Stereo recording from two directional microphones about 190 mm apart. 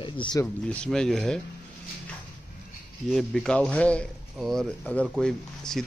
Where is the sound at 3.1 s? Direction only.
5° left (ahead or behind).